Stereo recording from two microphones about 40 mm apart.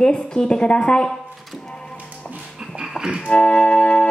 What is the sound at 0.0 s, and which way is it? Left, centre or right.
Speech, left.